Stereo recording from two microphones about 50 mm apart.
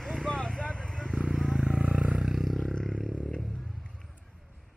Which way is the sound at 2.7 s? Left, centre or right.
Centre.